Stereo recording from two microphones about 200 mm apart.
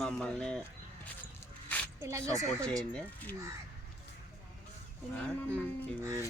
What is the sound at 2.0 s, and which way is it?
Speech, 15° right (ahead or behind).